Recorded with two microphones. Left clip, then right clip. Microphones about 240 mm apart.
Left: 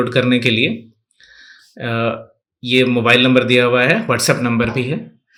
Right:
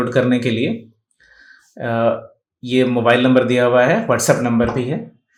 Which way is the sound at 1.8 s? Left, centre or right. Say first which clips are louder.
Right 2 dB; left.